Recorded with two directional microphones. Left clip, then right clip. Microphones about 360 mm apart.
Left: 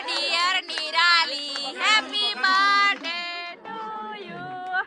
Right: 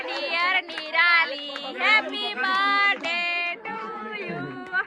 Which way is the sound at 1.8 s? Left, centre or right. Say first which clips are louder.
Even; centre.